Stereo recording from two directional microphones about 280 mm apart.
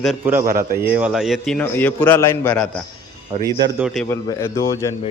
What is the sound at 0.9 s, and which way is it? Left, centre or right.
Speech, centre.